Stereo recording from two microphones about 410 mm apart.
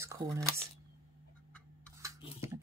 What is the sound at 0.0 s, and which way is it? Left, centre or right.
Speech, centre.